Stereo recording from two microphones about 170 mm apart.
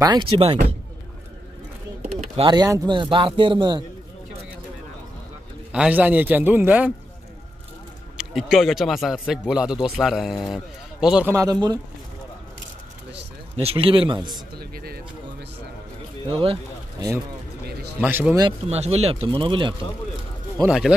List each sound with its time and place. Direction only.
0.0 s speech: 25° right (ahead or behind)
2.1 s speech: 30° right (ahead or behind)
5.7 s a man's voice: 10° right (ahead or behind)
8.2 s speech: 5° right (ahead or behind)
11.3 s speech: 25° right (ahead or behind)
13.6 s speech: 35° right (ahead or behind)
14.6 s a sound: 65° right (ahead or behind)
16.3 s speech: 35° right (ahead or behind)
18.0 s a man's voice: 10° right (ahead or behind)
18.7 s speech: 40° right (ahead or behind)
20.6 s speech: 5° right (ahead or behind)